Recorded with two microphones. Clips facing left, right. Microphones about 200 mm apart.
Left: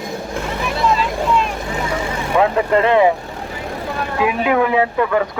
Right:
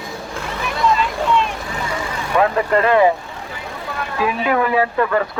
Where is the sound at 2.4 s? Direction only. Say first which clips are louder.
Left 1 dB; 20° left (ahead or behind).